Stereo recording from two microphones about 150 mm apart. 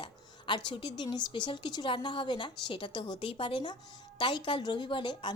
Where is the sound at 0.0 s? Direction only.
30° left (ahead or behind).